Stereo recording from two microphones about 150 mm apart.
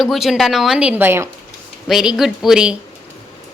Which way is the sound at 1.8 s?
5° right (ahead or behind).